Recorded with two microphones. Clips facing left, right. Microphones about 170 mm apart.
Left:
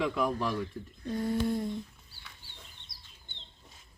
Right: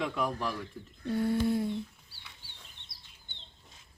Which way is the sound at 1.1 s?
5° right (ahead or behind).